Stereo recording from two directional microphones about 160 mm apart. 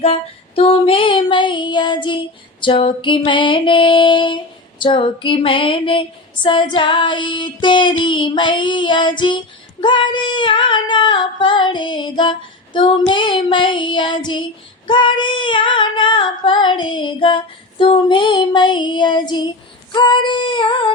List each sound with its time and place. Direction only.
0.0 s female singing: 40° left (ahead or behind)